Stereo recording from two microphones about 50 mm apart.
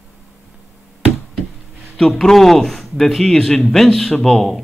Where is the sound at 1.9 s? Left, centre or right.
Centre.